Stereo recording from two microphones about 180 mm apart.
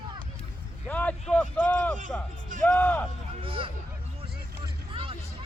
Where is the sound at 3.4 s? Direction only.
30° right (ahead or behind).